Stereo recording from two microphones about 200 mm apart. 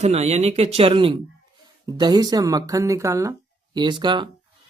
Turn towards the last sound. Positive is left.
turn(degrees=-25)  # may be behind; listen again after turning